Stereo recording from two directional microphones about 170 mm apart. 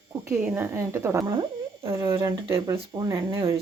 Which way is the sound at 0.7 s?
15° right (ahead or behind).